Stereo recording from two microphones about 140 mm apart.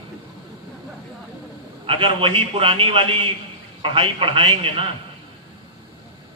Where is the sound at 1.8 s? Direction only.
40° right (ahead or behind).